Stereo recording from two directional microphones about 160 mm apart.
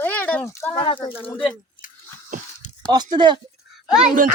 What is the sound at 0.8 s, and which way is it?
Speech, 25° left (ahead or behind).